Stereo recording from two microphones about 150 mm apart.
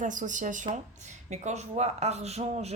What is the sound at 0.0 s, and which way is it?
Speech, 60° right (ahead or behind).